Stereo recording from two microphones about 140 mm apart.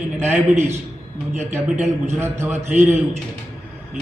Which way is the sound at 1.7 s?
55° right (ahead or behind).